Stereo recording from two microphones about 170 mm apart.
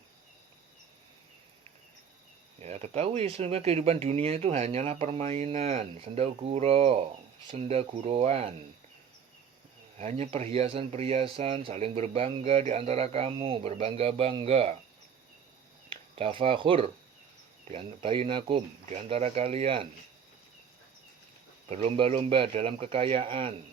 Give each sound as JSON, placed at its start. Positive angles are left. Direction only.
{"t": 2.6, "sound": "speech", "side_deg": -40}
{"t": 10.0, "sound": "speech", "side_deg": -40}
{"t": 15.9, "sound": "speech", "side_deg": -35}
{"t": 21.7, "sound": "speech", "side_deg": -35}